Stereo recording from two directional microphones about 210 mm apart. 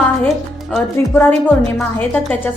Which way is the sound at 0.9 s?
10° left (ahead or behind).